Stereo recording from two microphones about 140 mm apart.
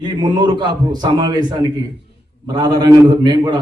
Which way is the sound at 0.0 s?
30° right (ahead or behind).